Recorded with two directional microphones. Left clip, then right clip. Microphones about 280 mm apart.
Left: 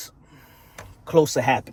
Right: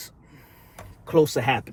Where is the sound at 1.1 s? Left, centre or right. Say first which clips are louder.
Left 2 dB; centre.